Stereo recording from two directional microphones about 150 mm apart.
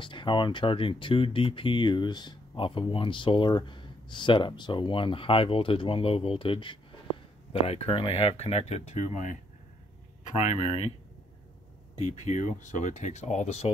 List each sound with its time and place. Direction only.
0.0 s speech: 35° left (ahead or behind)
12.0 s speech: 55° left (ahead or behind)